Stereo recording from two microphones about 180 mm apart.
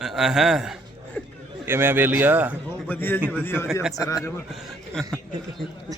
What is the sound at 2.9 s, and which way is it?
Speech, 10° left (ahead or behind).